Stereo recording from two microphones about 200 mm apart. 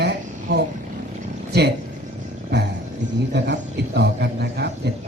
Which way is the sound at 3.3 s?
55° right (ahead or behind).